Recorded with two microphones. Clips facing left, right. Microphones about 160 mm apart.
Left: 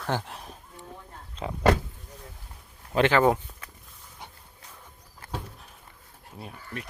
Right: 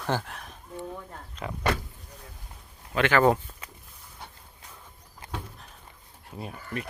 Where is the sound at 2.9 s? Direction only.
30° left (ahead or behind).